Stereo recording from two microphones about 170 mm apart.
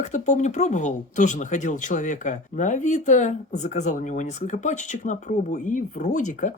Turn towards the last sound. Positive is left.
turn(degrees=45)  # may be behind; listen again after turning